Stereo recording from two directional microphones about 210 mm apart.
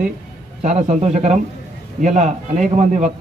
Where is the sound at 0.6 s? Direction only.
30° right (ahead or behind).